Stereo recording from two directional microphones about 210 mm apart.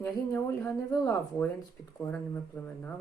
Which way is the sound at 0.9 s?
15° left (ahead or behind).